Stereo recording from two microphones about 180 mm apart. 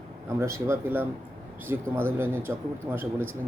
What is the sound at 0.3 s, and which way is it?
Speech, 15° right (ahead or behind).